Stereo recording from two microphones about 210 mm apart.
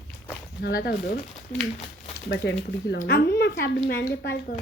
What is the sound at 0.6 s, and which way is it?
Speech, 50° left (ahead or behind).